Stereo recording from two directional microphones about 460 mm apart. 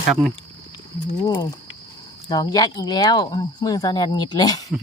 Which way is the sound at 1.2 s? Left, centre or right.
Centre.